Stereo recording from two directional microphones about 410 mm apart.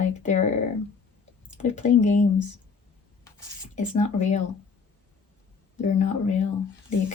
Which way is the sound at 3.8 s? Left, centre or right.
Centre.